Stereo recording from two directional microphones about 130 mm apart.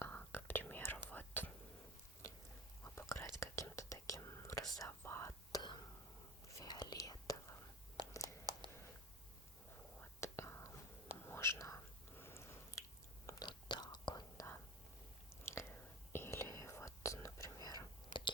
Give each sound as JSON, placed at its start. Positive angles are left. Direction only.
{"t": 0.0, "sound": "whispering", "side_deg": 15}
{"t": 2.8, "sound": "whispering", "side_deg": 20}
{"t": 8.2, "sound": "a sound", "side_deg": -30}
{"t": 10.0, "sound": "whispering", "side_deg": 20}
{"t": 13.2, "sound": "chewing", "side_deg": 25}
{"t": 13.5, "sound": "whispering", "side_deg": 35}
{"t": 15.5, "sound": "chewing", "side_deg": 20}
{"t": 16.1, "sound": "whispering", "side_deg": 20}